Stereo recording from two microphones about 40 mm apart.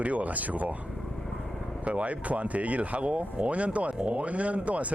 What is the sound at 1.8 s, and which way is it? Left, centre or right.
Speech, right.